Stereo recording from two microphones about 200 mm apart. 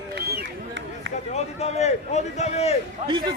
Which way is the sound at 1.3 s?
35° left (ahead or behind).